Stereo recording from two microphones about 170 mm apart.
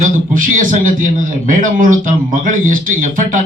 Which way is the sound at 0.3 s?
50° right (ahead or behind).